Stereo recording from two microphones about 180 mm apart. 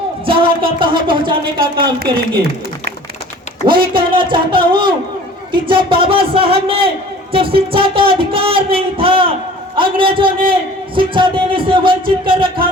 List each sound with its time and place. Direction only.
0.3 s a sound: 30° right (ahead or behind)
0.8 s speech: 25° right (ahead or behind)
3.7 s speech: 25° right (ahead or behind)